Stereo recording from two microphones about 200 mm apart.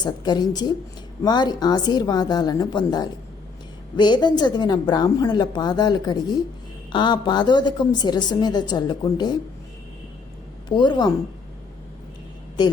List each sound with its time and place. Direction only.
0.0 s a woman's voice: 20° left (ahead or behind)
10.7 s a woman's voice: 20° left (ahead or behind)
12.6 s a woman's voice: 20° left (ahead or behind)